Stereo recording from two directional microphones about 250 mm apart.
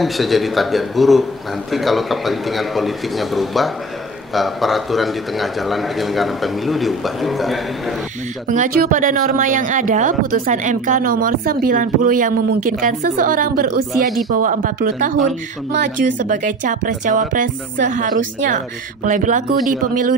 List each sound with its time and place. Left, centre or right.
0.0 s a man's voice: centre
8.5 s speech: right